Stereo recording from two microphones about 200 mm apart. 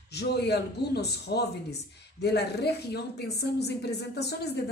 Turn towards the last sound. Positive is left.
turn(degrees=55)  # may be behind; listen again after turning